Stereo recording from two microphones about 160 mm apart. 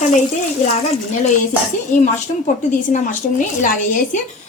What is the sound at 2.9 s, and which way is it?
A woman's voice, 50° left (ahead or behind).